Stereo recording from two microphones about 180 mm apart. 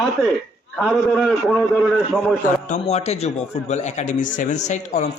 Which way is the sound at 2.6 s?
40° left (ahead or behind).